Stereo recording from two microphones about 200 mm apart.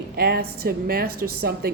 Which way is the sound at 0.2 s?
50° right (ahead or behind).